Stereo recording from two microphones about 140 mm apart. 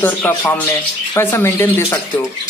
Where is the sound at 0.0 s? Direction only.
15° left (ahead or behind).